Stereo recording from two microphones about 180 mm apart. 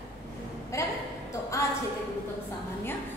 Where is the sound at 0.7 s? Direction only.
15° left (ahead or behind).